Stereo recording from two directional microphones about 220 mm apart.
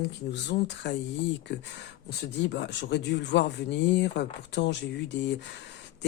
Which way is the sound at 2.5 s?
50° left (ahead or behind).